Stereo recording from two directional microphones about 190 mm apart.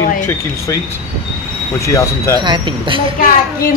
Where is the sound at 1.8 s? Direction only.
15° left (ahead or behind).